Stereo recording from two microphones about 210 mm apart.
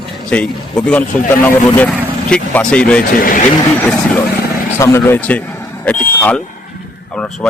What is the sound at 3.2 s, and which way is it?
Speech, 40° left (ahead or behind).